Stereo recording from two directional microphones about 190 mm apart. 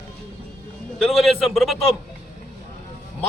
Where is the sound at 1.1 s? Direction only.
Centre (ahead or behind).